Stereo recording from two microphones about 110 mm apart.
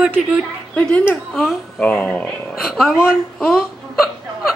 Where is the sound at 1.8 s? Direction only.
10° left (ahead or behind).